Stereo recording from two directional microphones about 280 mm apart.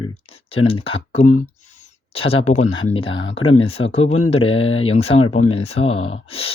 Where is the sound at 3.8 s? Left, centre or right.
Left.